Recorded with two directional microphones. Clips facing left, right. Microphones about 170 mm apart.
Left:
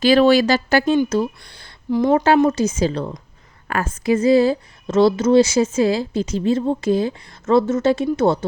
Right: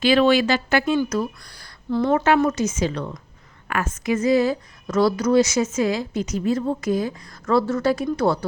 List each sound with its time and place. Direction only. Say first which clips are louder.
0.0 s speech: left 3 dB; 40° left (ahead or behind)
1.1 s speech: left 4 dB; 25° left (ahead or behind)
1.9 s speech: left 4 dB; 10° left (ahead or behind)
2.1 s a woman's voice: left 4 dB; 30° left (ahead or behind)